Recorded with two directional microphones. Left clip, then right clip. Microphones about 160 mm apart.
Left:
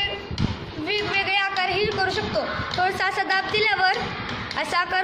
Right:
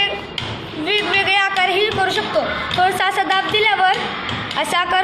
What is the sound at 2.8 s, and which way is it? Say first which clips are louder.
A woman's voice: right 6 dB; 10° left (ahead or behind).